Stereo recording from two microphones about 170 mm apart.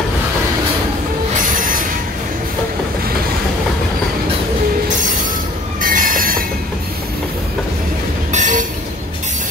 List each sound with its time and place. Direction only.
1.3 s train wheels squealing: 50° right (ahead or behind)
5.8 s train: 55° right (ahead or behind)
8.3 s train: 45° right (ahead or behind)